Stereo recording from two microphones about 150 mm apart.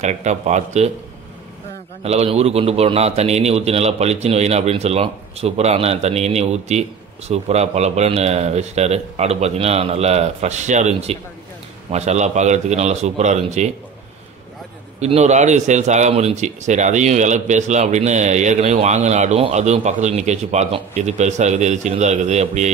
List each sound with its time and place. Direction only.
0.0 s a man's voice: 50° right (ahead or behind)
2.0 s a man's voice: 45° right (ahead or behind)
15.0 s a man's voice: 50° right (ahead or behind)